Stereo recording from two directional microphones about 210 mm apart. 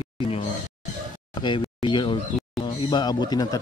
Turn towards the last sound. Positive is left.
turn(degrees=20)  # may be behind; listen again after turning